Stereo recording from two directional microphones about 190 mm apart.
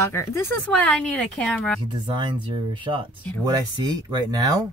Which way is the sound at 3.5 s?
20° right (ahead or behind).